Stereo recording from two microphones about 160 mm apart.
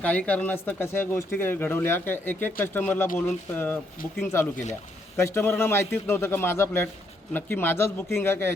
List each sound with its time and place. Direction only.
0.0 s speech: 10° left (ahead or behind)